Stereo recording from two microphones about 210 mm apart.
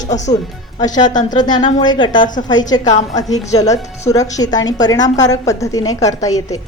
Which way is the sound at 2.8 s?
35° left (ahead or behind).